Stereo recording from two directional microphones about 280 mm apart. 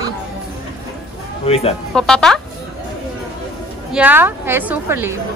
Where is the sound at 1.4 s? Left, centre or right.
Left.